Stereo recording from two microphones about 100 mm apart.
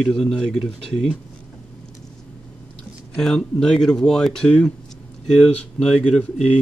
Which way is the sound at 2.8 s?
5° left (ahead or behind).